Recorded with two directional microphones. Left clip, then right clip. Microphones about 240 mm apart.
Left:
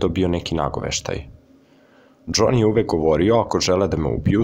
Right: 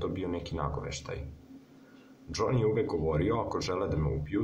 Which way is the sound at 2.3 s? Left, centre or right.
Left.